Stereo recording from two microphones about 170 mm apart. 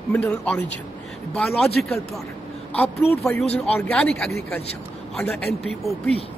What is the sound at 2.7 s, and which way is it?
A man's voice, 10° left (ahead or behind).